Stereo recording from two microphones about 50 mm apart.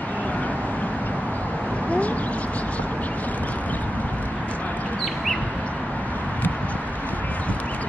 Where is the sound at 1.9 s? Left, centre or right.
Left.